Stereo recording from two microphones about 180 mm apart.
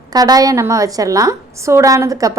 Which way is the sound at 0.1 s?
20° right (ahead or behind).